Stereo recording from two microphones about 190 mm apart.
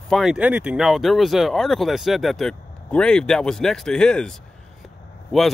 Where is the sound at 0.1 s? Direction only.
5° right (ahead or behind).